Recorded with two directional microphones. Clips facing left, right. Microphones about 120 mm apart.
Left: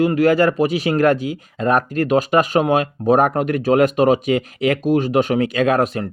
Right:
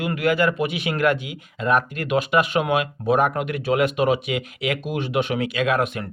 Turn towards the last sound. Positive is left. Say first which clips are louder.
# left 5 dB
turn(degrees=35)  # may be behind; listen again after turning